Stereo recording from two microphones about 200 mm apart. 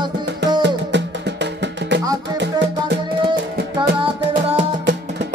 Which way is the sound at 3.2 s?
25° right (ahead or behind).